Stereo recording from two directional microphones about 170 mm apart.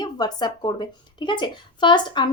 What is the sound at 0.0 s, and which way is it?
Speech, 25° left (ahead or behind).